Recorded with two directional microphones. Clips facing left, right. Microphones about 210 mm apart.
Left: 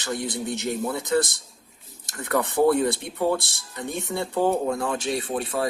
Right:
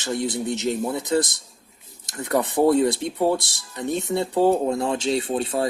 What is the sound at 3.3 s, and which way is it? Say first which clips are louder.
Speech: right 1 dB; 55° left (ahead or behind).